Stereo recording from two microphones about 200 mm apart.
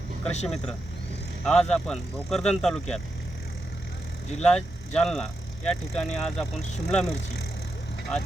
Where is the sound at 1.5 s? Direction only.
5° left (ahead or behind).